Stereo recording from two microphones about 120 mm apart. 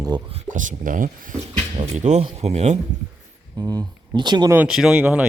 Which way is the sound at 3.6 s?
30° right (ahead or behind).